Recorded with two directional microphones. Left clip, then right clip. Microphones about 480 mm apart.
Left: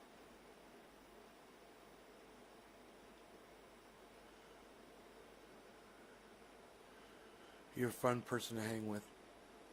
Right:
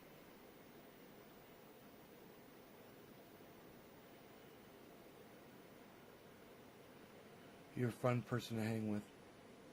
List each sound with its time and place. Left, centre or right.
7.8 s speech: centre